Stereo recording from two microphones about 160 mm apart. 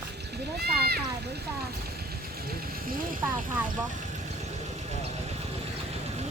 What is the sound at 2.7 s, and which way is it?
Vehicle, 65° right (ahead or behind).